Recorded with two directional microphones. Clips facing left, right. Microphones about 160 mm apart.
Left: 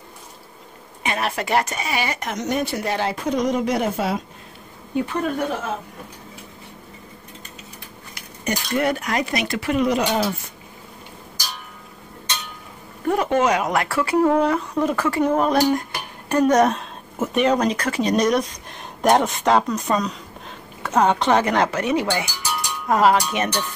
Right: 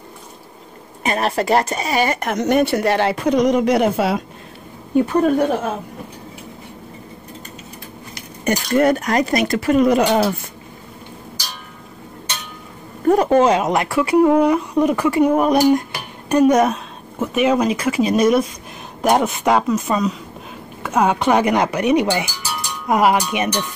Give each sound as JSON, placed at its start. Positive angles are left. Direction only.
{"t": 1.0, "sound": "speech", "side_deg": -40}
{"t": 4.9, "sound": "speech", "side_deg": -40}
{"t": 8.5, "sound": "speech", "side_deg": -45}
{"t": 13.0, "sound": "speech", "side_deg": -40}